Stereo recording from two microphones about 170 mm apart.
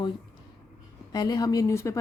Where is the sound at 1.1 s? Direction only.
25° left (ahead or behind).